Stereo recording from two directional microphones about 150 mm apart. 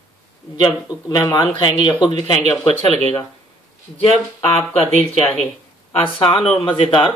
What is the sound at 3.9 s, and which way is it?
Speech, 40° left (ahead or behind).